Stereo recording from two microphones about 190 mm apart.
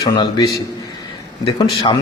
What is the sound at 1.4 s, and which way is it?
Speech, 25° left (ahead or behind).